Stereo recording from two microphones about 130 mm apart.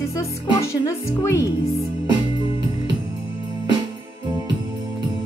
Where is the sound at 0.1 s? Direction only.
25° left (ahead or behind).